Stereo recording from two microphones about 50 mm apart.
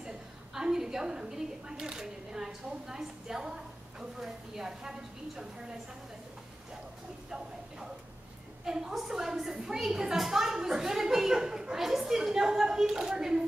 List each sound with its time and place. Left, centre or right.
0.6 s a woman's voice: centre
7.2 s a woman's voice: centre